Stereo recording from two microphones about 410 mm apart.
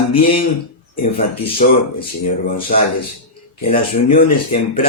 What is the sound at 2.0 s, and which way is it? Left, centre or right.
Speech, centre.